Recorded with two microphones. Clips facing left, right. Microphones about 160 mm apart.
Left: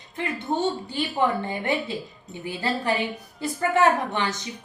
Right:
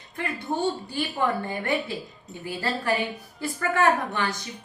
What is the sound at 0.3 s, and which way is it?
A woman's voice, 20° left (ahead or behind).